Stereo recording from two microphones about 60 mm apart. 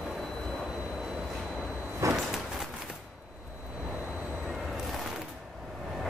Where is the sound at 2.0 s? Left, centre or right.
Right.